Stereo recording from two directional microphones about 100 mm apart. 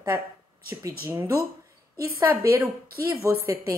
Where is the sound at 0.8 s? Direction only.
35° right (ahead or behind).